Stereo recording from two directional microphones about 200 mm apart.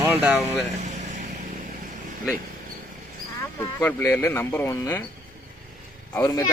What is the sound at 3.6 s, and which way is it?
Speech, 10° left (ahead or behind).